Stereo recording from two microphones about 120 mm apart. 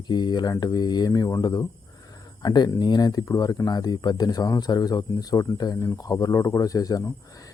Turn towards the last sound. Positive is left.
turn(degrees=30)  # may be behind; listen again after turning